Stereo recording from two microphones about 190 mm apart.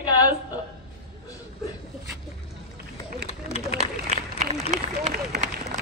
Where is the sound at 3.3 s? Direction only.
35° left (ahead or behind).